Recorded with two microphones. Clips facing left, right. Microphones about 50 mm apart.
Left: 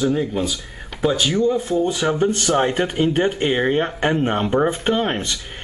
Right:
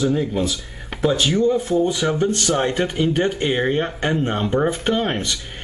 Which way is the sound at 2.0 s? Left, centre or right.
Centre.